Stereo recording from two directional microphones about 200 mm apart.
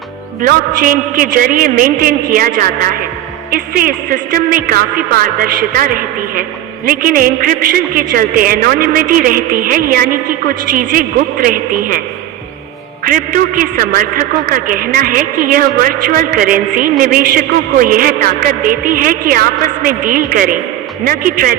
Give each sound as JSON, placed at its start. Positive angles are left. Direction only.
{"t": 0.4, "sound": "speech", "side_deg": -45}
{"t": 3.5, "sound": "speech", "side_deg": -45}
{"t": 13.1, "sound": "speech", "side_deg": -45}